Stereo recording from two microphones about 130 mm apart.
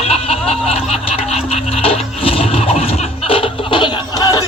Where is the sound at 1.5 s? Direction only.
50° left (ahead or behind).